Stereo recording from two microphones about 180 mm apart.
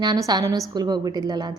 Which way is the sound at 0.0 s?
20° right (ahead or behind).